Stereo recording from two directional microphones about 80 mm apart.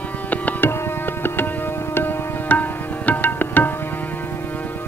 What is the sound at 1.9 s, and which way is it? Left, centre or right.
Music, left.